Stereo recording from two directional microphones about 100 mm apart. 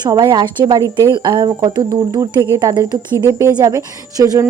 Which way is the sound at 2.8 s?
30° right (ahead or behind).